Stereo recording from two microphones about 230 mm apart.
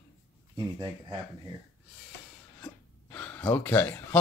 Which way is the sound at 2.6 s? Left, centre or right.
Centre.